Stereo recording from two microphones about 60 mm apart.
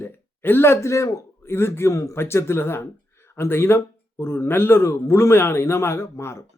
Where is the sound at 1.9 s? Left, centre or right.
Left.